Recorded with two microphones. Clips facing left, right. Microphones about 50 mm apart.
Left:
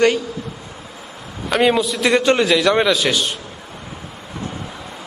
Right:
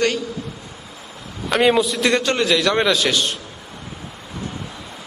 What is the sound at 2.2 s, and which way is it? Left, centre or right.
A man's voice, centre.